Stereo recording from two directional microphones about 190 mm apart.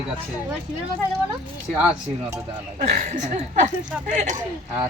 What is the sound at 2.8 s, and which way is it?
Speech, 40° right (ahead or behind).